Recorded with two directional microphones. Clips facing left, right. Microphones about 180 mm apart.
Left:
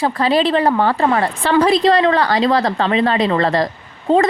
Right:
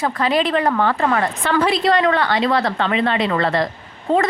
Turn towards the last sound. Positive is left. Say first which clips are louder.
# left 4 dB
turn(degrees=30)  # may be behind; listen again after turning